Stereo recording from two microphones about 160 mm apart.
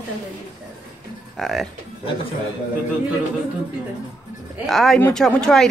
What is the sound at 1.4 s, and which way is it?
Speech, centre (ahead or behind).